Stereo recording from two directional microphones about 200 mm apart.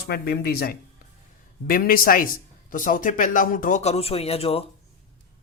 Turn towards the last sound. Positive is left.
turn(degrees=30)  # may be behind; listen again after turning